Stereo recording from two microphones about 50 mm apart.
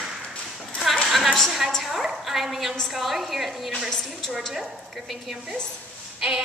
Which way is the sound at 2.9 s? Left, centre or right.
Centre.